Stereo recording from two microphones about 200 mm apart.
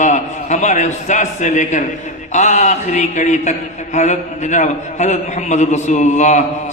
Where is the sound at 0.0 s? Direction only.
35° left (ahead or behind).